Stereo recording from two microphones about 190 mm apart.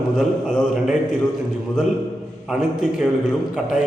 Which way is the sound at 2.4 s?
5° right (ahead or behind).